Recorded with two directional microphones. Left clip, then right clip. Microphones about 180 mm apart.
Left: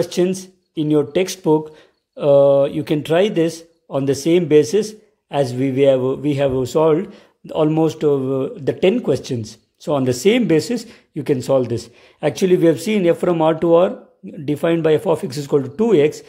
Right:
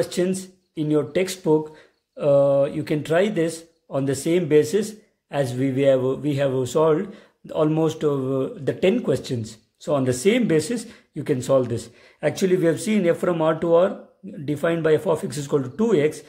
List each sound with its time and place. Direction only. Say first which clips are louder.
0.0 s speech: left 5 dB; 25° left (ahead or behind)